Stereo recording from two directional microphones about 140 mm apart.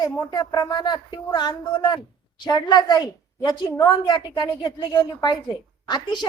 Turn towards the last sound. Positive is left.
turn(degrees=30)  # may be behind; listen again after turning